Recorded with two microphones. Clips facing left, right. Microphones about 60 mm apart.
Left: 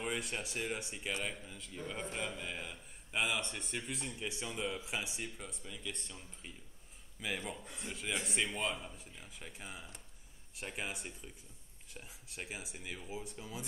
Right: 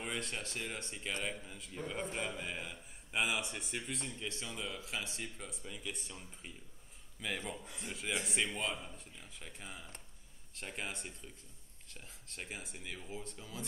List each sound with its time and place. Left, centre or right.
0.0 s a man's voice: centre
4.2 s speech: centre
5.4 s a man's voice: centre
7.2 s a man's voice: centre